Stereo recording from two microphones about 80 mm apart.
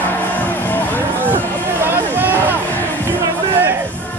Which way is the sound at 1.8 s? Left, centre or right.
Right.